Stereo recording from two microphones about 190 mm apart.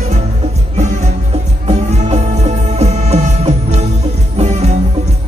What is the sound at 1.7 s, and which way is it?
Music, 35° right (ahead or behind).